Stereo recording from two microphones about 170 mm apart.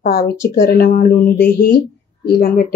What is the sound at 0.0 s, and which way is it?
Speech, 60° left (ahead or behind).